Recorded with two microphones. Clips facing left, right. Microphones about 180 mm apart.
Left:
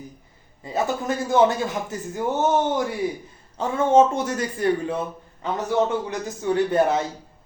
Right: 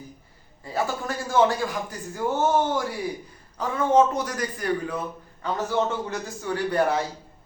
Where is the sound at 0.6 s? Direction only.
20° left (ahead or behind).